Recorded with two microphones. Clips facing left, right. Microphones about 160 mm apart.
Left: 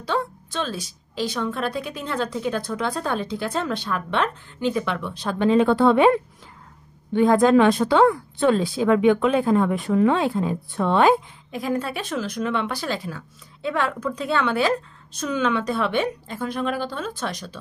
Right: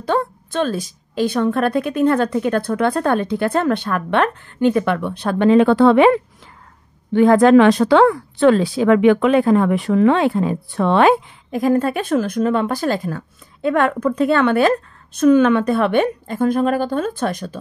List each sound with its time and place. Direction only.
0.0 s a woman's voice: 50° right (ahead or behind); by 6.2 s 90° right
7.1 s speech: 80° right
11.5 s speech: 50° right (ahead or behind)